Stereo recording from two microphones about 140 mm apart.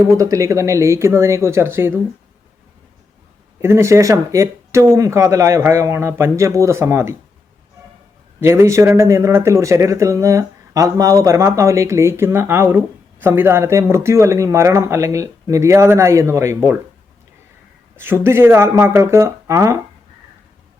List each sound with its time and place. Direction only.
0.2 s speech: 25° right (ahead or behind)
3.6 s speech: 20° right (ahead or behind)
8.4 s speech: 20° right (ahead or behind)
17.9 s speech: 15° right (ahead or behind)